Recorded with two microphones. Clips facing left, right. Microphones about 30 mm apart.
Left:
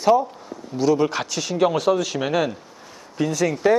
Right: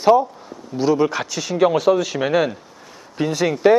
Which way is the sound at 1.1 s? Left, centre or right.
Centre.